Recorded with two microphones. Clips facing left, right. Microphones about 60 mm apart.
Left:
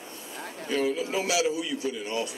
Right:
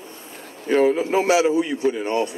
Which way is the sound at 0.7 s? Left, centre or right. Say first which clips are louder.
Right 10 dB; right.